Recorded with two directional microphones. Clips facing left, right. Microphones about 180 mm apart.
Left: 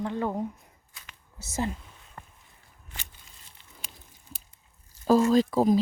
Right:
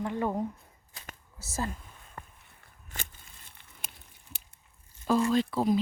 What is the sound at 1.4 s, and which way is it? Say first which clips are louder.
Speech: left 4 dB; 20° left (ahead or behind).